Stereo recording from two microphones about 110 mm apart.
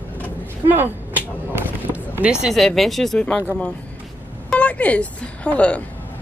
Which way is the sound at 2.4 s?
Centre (ahead or behind).